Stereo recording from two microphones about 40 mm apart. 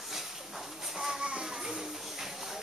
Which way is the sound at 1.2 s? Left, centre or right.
Right.